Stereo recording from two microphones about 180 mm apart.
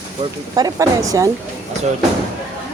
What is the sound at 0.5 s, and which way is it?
Speech, 20° right (ahead or behind).